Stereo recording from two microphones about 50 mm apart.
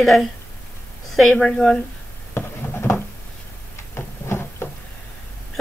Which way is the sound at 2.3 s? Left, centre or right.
Left.